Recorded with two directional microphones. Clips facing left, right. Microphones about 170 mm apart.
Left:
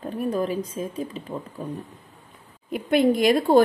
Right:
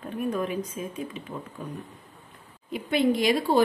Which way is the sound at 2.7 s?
50° left (ahead or behind).